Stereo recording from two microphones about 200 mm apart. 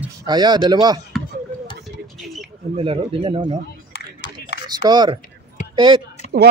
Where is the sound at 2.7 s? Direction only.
30° right (ahead or behind).